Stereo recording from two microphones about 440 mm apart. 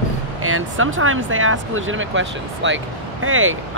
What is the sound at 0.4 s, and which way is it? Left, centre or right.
Speech, right.